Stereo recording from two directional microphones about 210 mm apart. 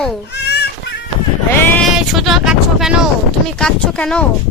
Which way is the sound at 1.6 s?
5° left (ahead or behind).